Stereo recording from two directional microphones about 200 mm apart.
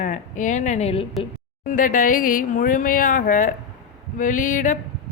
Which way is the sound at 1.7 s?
40° left (ahead or behind).